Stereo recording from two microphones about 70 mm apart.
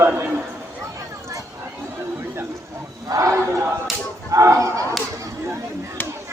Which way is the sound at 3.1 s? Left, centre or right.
Right.